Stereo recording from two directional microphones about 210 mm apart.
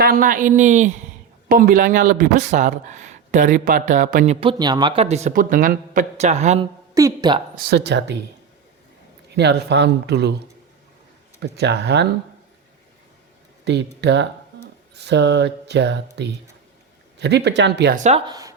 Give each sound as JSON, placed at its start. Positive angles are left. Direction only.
{"t": 0.0, "sound": "a man's voice", "side_deg": -40}
{"t": 6.9, "sound": "a woman's voice", "side_deg": -15}
{"t": 7.5, "sound": "a sound", "side_deg": -50}
{"t": 9.3, "sound": "speech", "side_deg": -55}
{"t": 11.3, "sound": "speech", "side_deg": -50}
{"t": 13.7, "sound": "a sound", "side_deg": -55}
{"t": 17.2, "sound": "speech", "side_deg": -55}
{"t": 17.9, "sound": "a man's voice", "side_deg": -35}
{"t": 18.3, "sound": "a woman's voice", "side_deg": -15}